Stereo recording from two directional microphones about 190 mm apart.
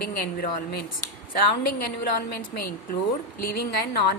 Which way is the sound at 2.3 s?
55° left (ahead or behind).